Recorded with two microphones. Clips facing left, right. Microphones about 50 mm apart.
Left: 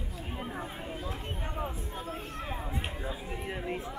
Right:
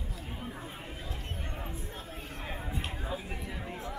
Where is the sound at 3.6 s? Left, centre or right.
Left.